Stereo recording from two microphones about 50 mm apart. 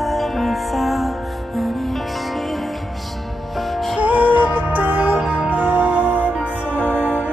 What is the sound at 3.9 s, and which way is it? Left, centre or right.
Music, right.